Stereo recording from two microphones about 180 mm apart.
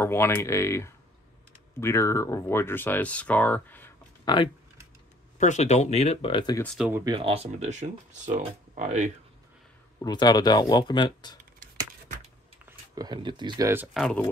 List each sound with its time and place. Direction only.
0.0 s speech: 15° left (ahead or behind)
4.2 s speech: 25° left (ahead or behind)
5.4 s speech: 40° left (ahead or behind)
6.6 s speech: 5° left (ahead or behind)
7.1 s speech: 30° right (ahead or behind)
9.9 s speech: 20° left (ahead or behind)
12.6 s speech: 20° right (ahead or behind)
13.9 s speech: centre (ahead or behind)